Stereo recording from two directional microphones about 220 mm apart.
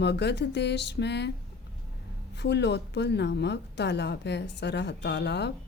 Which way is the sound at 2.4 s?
50° left (ahead or behind).